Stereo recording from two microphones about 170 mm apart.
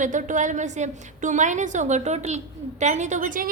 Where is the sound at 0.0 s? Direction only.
50° right (ahead or behind).